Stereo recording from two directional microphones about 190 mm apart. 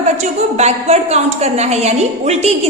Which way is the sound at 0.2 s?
35° right (ahead or behind).